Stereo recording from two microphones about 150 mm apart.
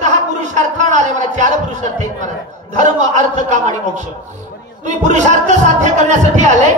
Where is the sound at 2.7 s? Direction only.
55° right (ahead or behind).